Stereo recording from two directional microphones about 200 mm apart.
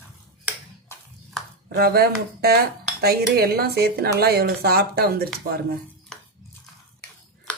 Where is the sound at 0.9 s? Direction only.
10° left (ahead or behind).